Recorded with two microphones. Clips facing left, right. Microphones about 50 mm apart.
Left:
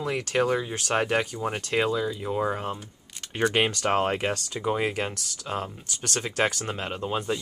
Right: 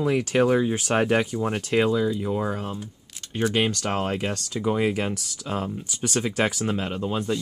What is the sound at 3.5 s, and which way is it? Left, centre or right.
Speech, centre.